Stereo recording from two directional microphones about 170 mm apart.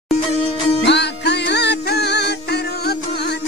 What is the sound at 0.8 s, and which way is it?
Music, 85° left.